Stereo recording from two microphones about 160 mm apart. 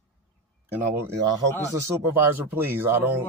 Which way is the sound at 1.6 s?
15° right (ahead or behind).